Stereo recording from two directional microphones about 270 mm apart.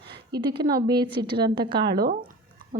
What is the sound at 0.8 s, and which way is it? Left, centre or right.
Speech, centre.